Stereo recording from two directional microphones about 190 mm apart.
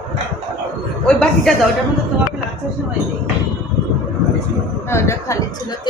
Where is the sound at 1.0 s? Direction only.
5° left (ahead or behind).